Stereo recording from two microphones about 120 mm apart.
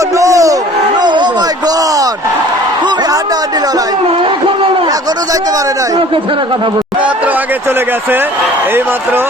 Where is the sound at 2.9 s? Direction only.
30° right (ahead or behind).